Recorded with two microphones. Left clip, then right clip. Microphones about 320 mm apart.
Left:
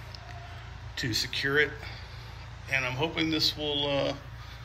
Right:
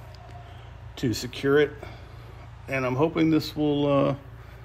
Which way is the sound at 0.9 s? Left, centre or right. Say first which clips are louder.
Even; centre.